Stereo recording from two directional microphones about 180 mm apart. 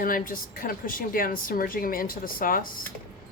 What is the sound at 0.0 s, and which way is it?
Speech, 50° left (ahead or behind).